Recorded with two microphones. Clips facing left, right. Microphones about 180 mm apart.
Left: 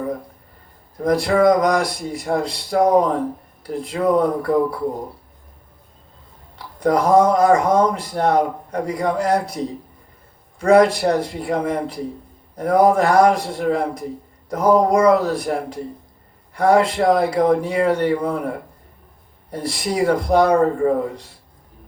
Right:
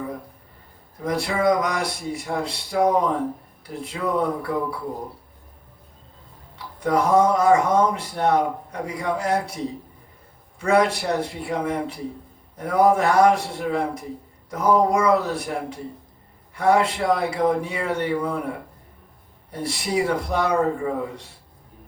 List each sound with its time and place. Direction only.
1.0 s speech: 40° left (ahead or behind)
6.8 s speech: 40° left (ahead or behind)
10.6 s speech: 40° left (ahead or behind)